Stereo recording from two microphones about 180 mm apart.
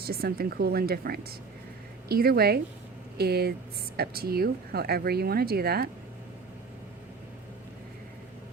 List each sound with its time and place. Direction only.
0.0 s speech: 60° right (ahead or behind)